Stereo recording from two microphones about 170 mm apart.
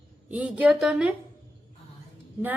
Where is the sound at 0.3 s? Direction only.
10° right (ahead or behind).